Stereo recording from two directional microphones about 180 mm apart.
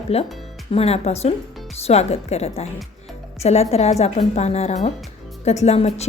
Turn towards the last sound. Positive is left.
turn(degrees=35)  # may be behind; listen again after turning